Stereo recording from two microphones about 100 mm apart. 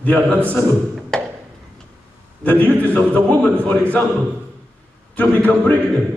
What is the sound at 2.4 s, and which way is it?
Music, 15° left (ahead or behind).